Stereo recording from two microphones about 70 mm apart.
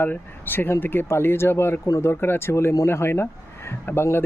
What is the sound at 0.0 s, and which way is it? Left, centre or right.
Speech, left.